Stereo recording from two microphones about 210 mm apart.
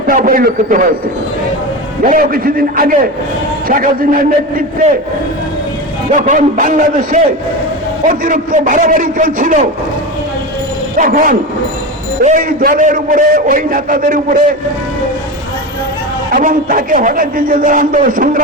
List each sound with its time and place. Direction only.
0.1 s a man's voice: 40° right (ahead or behind)
2.0 s a man's voice: 45° right (ahead or behind)
6.1 s a man's voice: 35° right (ahead or behind)
10.9 s a man's voice: 40° right (ahead or behind)
16.3 s a man's voice: 40° right (ahead or behind)